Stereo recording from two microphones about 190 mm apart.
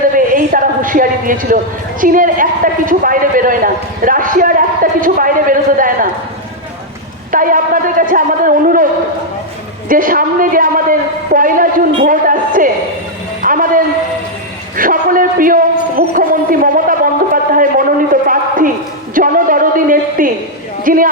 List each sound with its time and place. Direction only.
0.2 s a woman's voice: 45° right (ahead or behind)
7.3 s a man's voice: 45° right (ahead or behind)
9.9 s a sound: 45° right (ahead or behind)
12.0 s music: 45° right (ahead or behind)
13.4 s a sound: 45° right (ahead or behind)
20.8 s speech: 45° right (ahead or behind)